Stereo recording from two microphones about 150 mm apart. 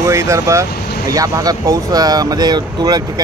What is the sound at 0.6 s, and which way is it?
Vehicle, 90° left.